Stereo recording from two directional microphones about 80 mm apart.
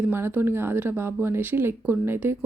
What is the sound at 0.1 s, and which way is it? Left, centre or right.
A woman's voice, right.